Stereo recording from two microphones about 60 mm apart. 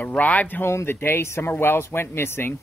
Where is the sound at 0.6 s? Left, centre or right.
Left.